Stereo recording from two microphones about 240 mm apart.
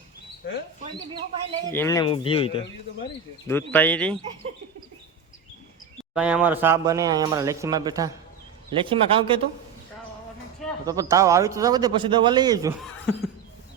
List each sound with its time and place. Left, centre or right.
0.4 s speech: left
1.7 s speech: centre
3.0 s speech: centre
6.1 s speech: centre; by 9.4 s right
10.8 s speech: centre
12.8 s speech: centre